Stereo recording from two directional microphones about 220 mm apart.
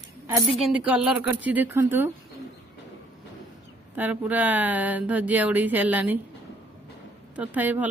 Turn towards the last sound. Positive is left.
turn(degrees=-5)  # may be behind; listen again after turning